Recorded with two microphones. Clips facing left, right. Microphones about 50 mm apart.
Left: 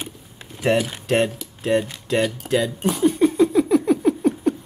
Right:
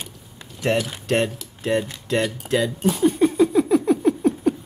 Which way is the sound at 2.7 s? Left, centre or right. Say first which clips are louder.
Even; centre.